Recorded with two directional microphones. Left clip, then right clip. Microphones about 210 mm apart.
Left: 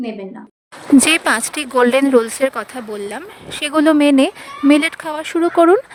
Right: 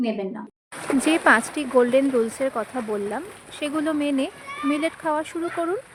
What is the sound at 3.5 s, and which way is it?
Speech, 45° left (ahead or behind).